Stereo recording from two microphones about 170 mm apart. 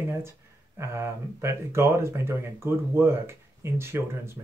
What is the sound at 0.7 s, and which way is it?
Speech, 15° right (ahead or behind).